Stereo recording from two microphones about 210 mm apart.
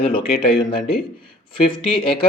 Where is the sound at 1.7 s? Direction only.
25° left (ahead or behind).